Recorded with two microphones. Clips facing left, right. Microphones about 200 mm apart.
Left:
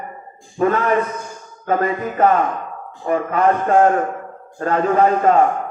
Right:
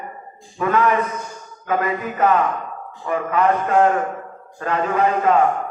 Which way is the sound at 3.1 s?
45° left (ahead or behind).